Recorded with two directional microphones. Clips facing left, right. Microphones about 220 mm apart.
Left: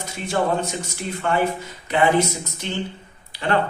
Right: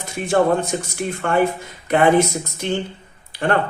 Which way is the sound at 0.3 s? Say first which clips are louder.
Right 5 dB; 50° right (ahead or behind).